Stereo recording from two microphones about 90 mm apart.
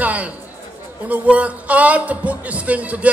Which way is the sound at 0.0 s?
15° right (ahead or behind).